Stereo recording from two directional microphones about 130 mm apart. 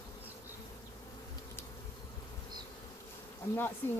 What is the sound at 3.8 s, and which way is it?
Speech, 15° left (ahead or behind).